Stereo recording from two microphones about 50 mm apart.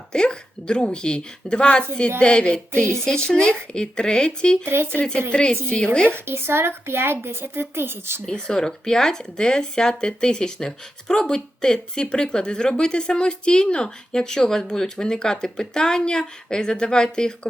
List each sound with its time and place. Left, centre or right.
0.1 s a woman's voice: centre
4.6 s speech: right
5.3 s a woman's voice: centre
6.2 s a woman's voice: right
8.3 s speech: centre